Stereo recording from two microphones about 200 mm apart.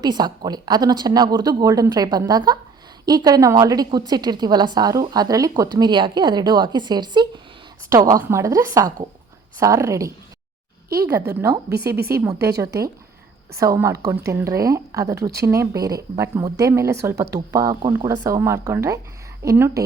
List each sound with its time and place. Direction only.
0.0 s a woman's voice: 20° right (ahead or behind)
10.8 s a sound: 50° right (ahead or behind)
11.3 s speech: 15° right (ahead or behind)
13.6 s a woman's voice: 15° right (ahead or behind)